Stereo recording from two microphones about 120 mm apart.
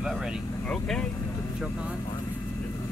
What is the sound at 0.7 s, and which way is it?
Vehicle, 5° left (ahead or behind).